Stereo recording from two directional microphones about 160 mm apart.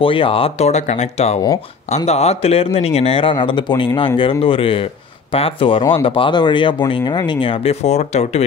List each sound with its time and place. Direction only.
0.0 s speech: 35° left (ahead or behind)